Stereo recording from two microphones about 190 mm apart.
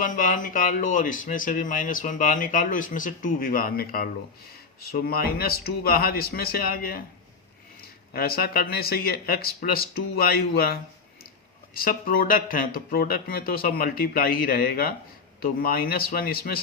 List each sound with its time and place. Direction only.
0.0 s speech: 45° left (ahead or behind)